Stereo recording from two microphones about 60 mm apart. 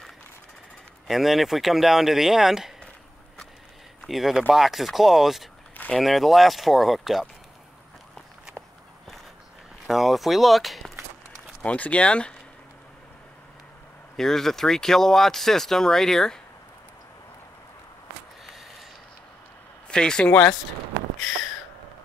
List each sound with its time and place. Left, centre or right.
1.0 s speech: centre
4.0 s speech: centre
9.8 s speech: centre
11.6 s speech: left
14.1 s speech: centre
19.9 s speech: centre